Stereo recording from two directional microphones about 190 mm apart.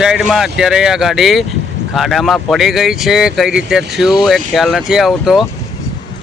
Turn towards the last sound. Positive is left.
turn(degrees=0)  # may be behind; listen again after turning